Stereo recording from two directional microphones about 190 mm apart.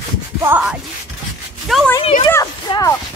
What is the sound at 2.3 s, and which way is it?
Speech, 20° left (ahead or behind).